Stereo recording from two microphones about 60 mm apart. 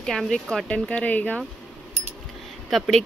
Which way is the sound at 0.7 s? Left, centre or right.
Centre.